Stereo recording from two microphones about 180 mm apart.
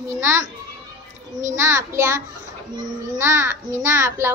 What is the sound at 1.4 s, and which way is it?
A child's voice, 15° right (ahead or behind).